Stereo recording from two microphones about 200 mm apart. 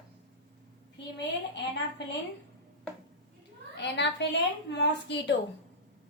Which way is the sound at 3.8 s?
60° left (ahead or behind).